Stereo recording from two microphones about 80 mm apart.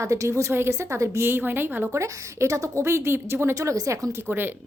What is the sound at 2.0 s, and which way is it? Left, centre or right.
A woman's voice, right.